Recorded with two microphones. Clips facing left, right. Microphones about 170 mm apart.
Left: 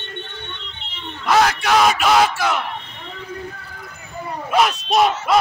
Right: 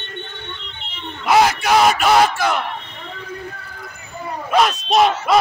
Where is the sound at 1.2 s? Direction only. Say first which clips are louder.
Right 2 dB; 10° right (ahead or behind).